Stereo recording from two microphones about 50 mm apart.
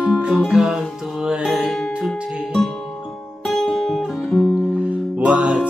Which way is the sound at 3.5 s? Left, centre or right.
Centre.